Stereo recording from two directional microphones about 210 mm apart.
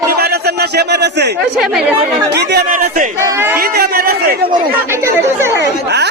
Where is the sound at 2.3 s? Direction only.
50° right (ahead or behind).